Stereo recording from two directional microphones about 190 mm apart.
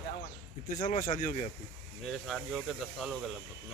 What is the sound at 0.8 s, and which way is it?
Speech, 40° left (ahead or behind).